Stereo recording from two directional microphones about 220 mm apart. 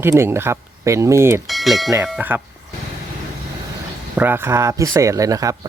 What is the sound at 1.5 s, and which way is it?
Speech, centre (ahead or behind).